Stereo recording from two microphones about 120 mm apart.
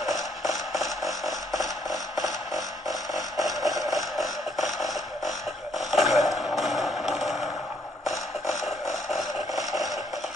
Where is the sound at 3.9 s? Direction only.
Centre (ahead or behind).